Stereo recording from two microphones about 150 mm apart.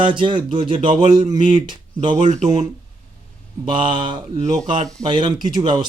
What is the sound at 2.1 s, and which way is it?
Speech, 55° right (ahead or behind).